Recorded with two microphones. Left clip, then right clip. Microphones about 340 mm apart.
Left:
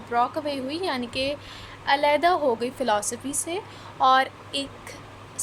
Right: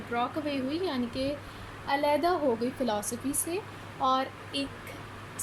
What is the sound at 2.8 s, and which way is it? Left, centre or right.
A woman's voice, left.